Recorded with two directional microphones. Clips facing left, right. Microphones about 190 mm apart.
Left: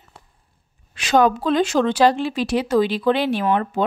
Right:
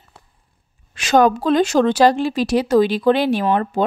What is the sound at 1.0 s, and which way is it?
Speech, 45° right (ahead or behind).